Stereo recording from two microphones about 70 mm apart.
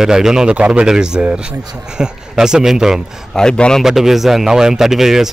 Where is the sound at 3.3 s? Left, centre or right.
Centre.